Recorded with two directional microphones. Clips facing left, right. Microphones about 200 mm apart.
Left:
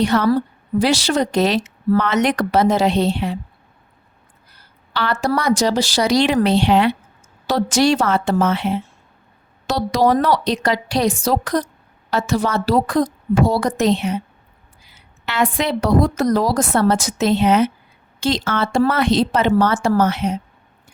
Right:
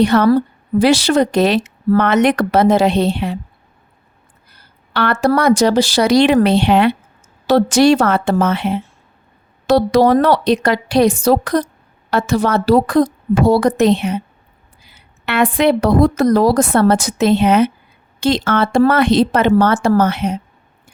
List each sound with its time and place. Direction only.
0.0 s speech: 60° right (ahead or behind)
4.9 s speech: 60° right (ahead or behind)
15.3 s speech: 60° right (ahead or behind)